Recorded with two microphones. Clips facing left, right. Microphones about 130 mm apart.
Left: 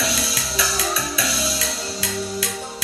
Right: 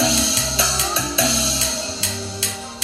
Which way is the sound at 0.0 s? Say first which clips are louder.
Right 5 dB; 25° right (ahead or behind).